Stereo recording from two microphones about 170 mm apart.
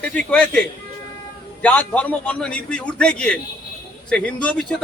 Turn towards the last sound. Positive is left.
turn(degrees=5)  # may be behind; listen again after turning